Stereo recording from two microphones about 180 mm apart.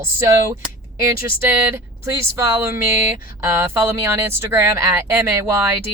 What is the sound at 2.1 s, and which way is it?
Speech, 15° right (ahead or behind).